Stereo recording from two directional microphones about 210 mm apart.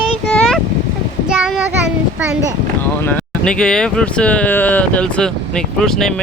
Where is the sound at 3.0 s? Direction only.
10° left (ahead or behind).